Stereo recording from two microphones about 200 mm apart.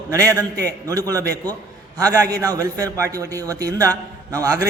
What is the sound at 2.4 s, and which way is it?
A man's voice, 15° right (ahead or behind).